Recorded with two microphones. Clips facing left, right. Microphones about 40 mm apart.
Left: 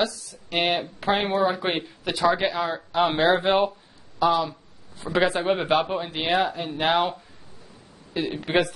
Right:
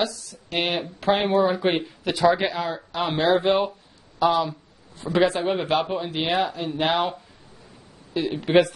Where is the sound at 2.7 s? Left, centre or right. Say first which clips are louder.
Left 3 dB; centre.